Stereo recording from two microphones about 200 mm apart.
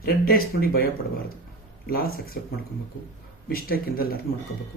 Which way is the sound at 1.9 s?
50° left (ahead or behind).